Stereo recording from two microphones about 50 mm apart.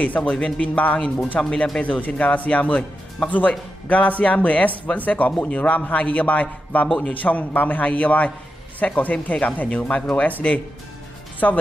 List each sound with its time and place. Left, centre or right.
0.0 s a man's voice: left
1.8 s a man's voice: left
11.4 s a man's voice: left